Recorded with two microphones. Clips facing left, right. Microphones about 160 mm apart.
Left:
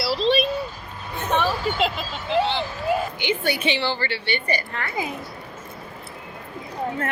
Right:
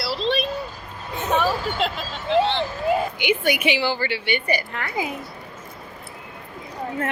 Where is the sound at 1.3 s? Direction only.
5° right (ahead or behind).